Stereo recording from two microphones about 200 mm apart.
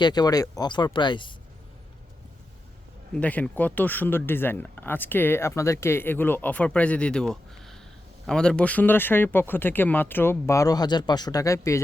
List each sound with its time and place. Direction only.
0.0 s speech: 20° left (ahead or behind)
3.2 s speech: 5° left (ahead or behind)